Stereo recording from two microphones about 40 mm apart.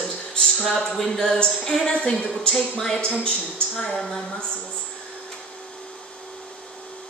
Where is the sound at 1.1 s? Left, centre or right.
Centre.